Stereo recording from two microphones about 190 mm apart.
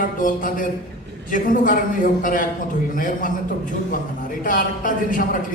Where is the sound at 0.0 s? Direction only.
45° left (ahead or behind).